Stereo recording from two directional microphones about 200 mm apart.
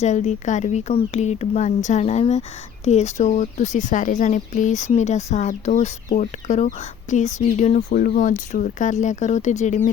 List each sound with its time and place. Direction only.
0.0 s speech: 35° left (ahead or behind)